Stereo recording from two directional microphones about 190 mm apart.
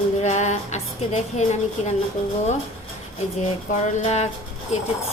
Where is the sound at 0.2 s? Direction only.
40° left (ahead or behind).